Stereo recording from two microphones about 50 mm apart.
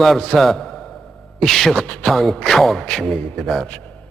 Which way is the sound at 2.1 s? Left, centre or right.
Centre.